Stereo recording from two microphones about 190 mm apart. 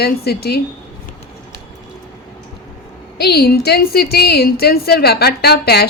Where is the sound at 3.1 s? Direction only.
55° left (ahead or behind).